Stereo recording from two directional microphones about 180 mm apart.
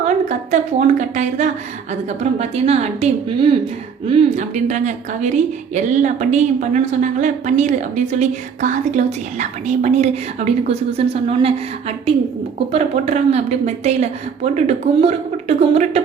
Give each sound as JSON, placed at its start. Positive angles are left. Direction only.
{"t": 0.0, "sound": "a woman's voice", "side_deg": -40}